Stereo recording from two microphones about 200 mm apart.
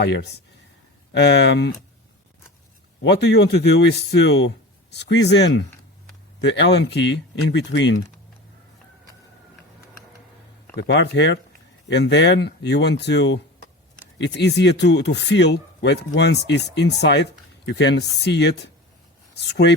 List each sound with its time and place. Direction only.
0.0 s speech: 55° left (ahead or behind)
3.0 s speech: 55° left (ahead or behind)
10.8 s speech: 60° left (ahead or behind)